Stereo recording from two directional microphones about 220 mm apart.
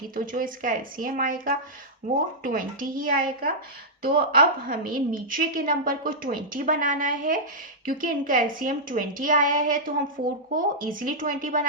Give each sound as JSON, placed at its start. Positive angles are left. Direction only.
{"t": 0.1, "sound": "a woman's voice", "side_deg": -40}